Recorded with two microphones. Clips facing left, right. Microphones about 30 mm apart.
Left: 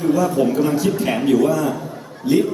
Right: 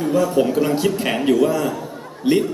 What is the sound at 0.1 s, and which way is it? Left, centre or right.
A man's voice, right.